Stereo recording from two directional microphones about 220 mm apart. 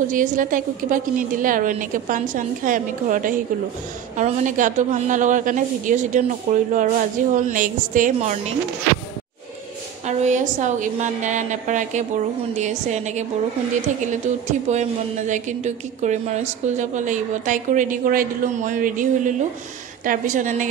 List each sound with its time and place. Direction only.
0.1 s a woman's voice: 35° right (ahead or behind)
10.0 s a woman's voice: 35° right (ahead or behind)
14.7 s a woman's voice: 30° right (ahead or behind)